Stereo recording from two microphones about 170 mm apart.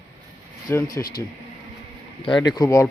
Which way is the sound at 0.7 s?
15° left (ahead or behind).